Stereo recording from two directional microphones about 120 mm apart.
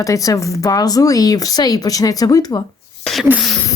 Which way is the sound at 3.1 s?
5° left (ahead or behind).